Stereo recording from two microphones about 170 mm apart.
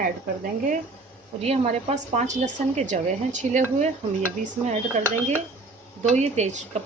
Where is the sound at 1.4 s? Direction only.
40° right (ahead or behind).